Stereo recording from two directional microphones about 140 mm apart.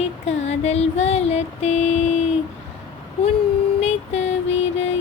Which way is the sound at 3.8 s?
50° left (ahead or behind).